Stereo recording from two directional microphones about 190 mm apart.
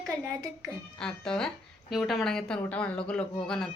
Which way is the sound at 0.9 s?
5° left (ahead or behind).